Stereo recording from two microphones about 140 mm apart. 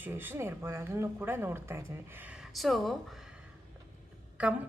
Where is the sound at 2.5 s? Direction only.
Centre (ahead or behind).